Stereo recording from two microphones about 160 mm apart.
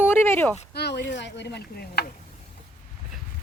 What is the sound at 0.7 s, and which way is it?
Speech, 90° left.